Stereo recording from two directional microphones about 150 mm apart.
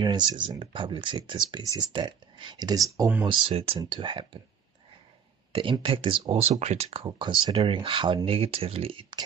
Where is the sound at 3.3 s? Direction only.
40° right (ahead or behind).